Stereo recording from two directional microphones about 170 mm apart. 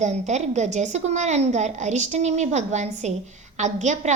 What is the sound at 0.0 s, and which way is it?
A woman's voice, 45° right (ahead or behind).